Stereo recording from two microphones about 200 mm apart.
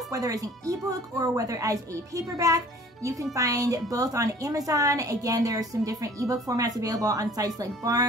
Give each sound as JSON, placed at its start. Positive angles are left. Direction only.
{"t": 0.1, "sound": "a woman's voice", "side_deg": -15}